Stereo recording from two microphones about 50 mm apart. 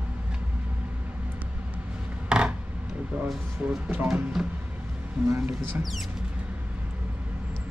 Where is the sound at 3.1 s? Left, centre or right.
Right.